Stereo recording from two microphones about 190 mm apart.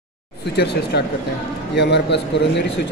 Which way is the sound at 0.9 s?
60° left (ahead or behind).